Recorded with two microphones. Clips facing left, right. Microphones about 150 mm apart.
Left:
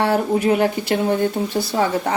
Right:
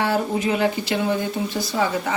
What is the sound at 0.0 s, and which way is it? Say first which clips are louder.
Speech: left 4 dB; 60° left (ahead or behind).